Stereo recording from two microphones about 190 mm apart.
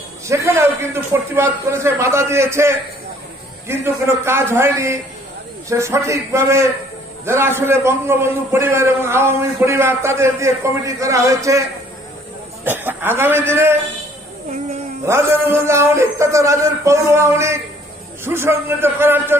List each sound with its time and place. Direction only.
0.3 s a man's voice: 15° right (ahead or behind)
12.6 s a man's voice: 10° right (ahead or behind)
15.0 s a man's voice: 15° right (ahead or behind)